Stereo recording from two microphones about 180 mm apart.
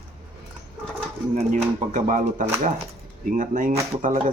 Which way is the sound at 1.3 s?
45° right (ahead or behind).